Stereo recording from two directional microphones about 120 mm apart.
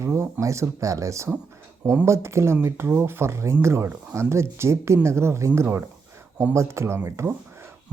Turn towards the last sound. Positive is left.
turn(degrees=-20)  # may be behind; listen again after turning